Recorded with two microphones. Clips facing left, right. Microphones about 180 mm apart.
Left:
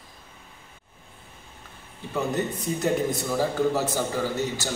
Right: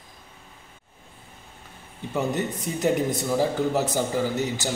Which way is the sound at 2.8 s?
20° right (ahead or behind).